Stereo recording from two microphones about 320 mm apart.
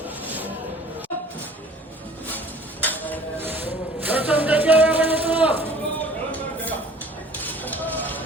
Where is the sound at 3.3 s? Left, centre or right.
Centre.